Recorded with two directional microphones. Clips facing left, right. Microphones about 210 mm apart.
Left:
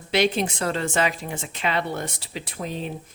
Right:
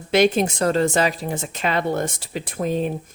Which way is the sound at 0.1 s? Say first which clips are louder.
Right 5 dB; 45° right (ahead or behind).